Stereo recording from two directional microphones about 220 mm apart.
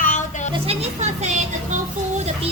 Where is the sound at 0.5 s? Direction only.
25° right (ahead or behind).